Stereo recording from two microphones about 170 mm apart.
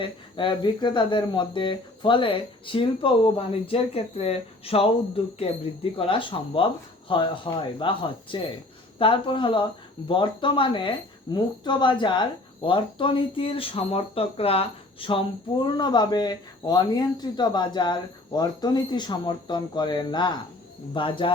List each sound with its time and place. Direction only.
0.0 s speech: 30° left (ahead or behind)